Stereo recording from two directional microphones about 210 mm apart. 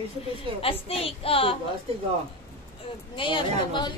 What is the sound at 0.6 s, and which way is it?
Speech, 25° left (ahead or behind).